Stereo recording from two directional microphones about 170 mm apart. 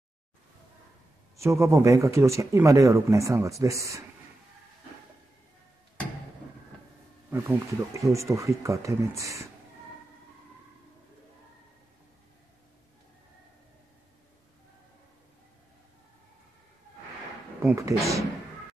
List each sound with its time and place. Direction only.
1.3 s speech: 15° right (ahead or behind)
7.2 s speech: 15° right (ahead or behind)
17.6 s speech: 20° right (ahead or behind)